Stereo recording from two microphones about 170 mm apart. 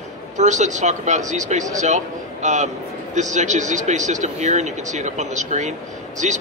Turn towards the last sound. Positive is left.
turn(degrees=-45)  # may be behind; listen again after turning